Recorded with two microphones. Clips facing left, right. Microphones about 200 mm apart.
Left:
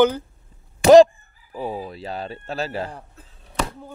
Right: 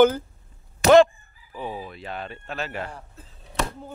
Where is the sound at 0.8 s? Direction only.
35° left (ahead or behind).